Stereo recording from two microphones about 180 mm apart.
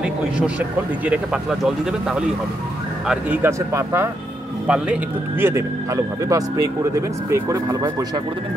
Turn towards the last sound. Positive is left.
turn(degrees=-15)  # may be behind; listen again after turning